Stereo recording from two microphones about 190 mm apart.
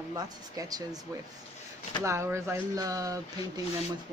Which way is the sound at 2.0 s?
15° right (ahead or behind).